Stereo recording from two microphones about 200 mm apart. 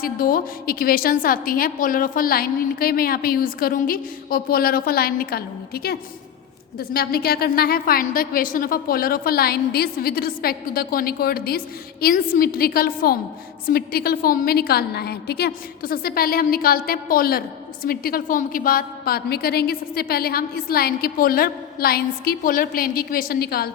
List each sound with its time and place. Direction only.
0.0 s a woman's voice: 45° left (ahead or behind)